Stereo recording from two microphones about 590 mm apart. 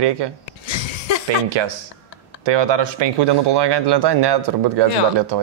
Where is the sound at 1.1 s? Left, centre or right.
Left.